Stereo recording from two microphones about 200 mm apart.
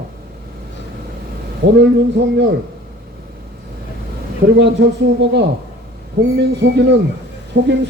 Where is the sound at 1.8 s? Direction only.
60° right (ahead or behind).